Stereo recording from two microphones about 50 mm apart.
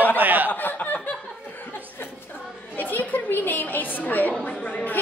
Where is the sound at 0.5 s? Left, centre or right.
Left.